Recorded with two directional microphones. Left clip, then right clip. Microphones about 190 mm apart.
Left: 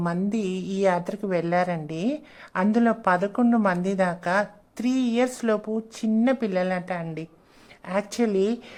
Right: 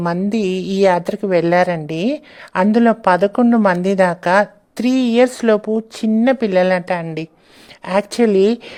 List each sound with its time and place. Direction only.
0.0 s a woman's voice: 35° right (ahead or behind)